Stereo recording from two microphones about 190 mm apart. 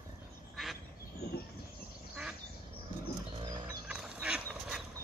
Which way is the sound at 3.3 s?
25° right (ahead or behind).